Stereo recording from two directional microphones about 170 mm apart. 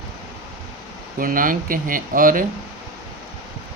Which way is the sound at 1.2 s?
55° right (ahead or behind).